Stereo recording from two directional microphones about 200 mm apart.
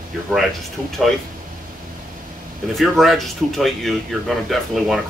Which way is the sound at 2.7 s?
Centre (ahead or behind).